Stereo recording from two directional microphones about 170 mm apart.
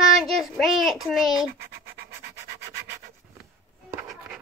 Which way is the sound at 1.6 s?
70° right (ahead or behind).